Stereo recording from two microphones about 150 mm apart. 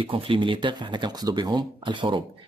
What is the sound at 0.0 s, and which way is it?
Speech, 35° right (ahead or behind).